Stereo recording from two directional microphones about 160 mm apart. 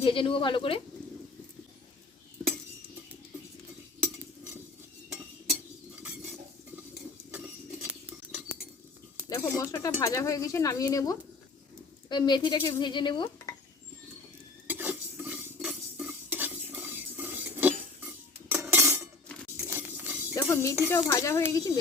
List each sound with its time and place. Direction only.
0.0 s speech: 35° left (ahead or behind)
7.3 s patter: 10° right (ahead or behind)
9.3 s speech: 20° left (ahead or behind)
14.7 s cutlery: 10° right (ahead or behind)
19.5 s a sound: 10° right (ahead or behind)
20.3 s a sound: 20° left (ahead or behind)
20.9 s speech: 15° left (ahead or behind)